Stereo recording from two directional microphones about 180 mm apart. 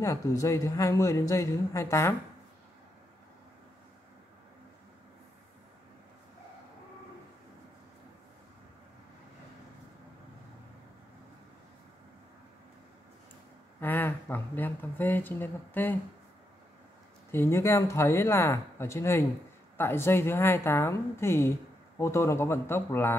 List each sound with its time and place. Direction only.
0.0 s a woman's voice: 15° left (ahead or behind)
13.7 s a woman's voice: 10° left (ahead or behind)
17.3 s a woman's voice: 15° left (ahead or behind)